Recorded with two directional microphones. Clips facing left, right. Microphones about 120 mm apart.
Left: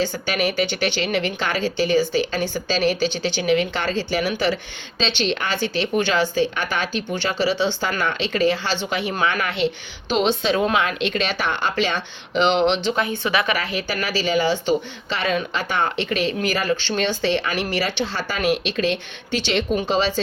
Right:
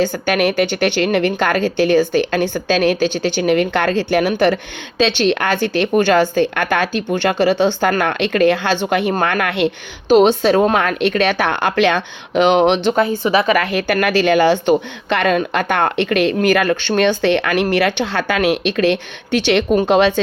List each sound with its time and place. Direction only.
0.0 s speech: 50° right (ahead or behind)
13.3 s a woman's voice: 35° right (ahead or behind)
13.6 s speech: 60° right (ahead or behind)